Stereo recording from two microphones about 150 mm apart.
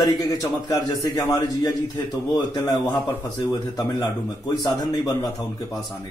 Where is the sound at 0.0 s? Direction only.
25° left (ahead or behind).